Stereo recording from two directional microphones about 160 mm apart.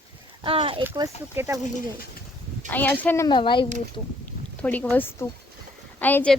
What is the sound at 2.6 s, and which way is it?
Speech, 10° left (ahead or behind).